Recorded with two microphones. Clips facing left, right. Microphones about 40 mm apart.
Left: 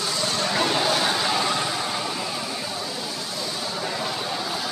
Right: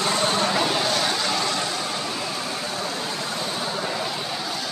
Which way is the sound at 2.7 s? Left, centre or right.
Right.